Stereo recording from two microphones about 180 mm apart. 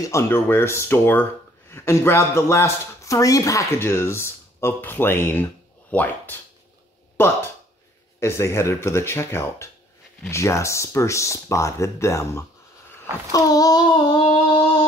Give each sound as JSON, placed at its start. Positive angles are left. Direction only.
{"t": 0.0, "sound": "speech", "side_deg": 15}
{"t": 13.3, "sound": "child singing", "side_deg": 20}